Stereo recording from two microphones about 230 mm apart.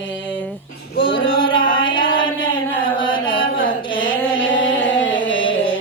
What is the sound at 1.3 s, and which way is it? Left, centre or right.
Music, left.